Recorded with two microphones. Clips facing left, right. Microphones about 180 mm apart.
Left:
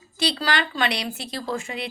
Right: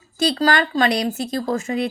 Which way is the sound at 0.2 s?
45° right (ahead or behind).